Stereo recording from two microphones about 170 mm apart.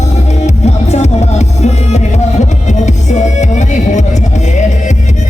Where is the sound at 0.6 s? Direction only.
40° left (ahead or behind).